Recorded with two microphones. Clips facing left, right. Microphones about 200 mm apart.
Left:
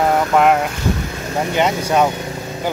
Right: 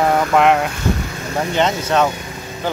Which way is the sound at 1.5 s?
10° left (ahead or behind).